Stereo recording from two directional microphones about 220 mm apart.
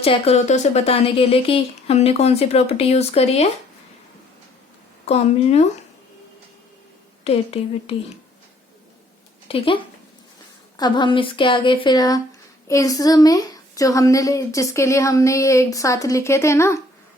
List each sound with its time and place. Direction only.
0.0 s speech: 25° left (ahead or behind)
5.0 s speech: 30° left (ahead or behind)
7.3 s speech: 25° left (ahead or behind)
9.5 s a woman's voice: 25° left (ahead or behind)